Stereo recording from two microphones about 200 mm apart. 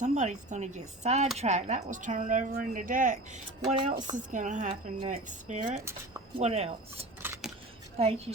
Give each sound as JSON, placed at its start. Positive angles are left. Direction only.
{"t": 0.0, "sound": "speech", "side_deg": -35}
{"t": 7.2, "sound": "scissors", "side_deg": -10}
{"t": 7.9, "sound": "speech", "side_deg": -30}